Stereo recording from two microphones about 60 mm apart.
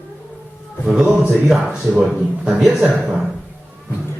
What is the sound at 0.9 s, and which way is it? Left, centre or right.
Speech, centre.